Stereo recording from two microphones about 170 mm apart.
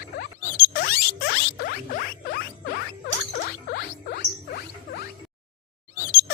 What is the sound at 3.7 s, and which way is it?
Rodents, 65° left (ahead or behind).